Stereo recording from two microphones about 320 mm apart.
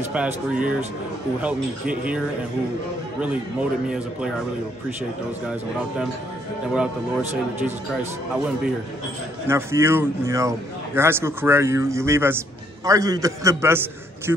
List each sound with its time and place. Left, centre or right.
0.1 s speech: centre
9.5 s a man's voice: centre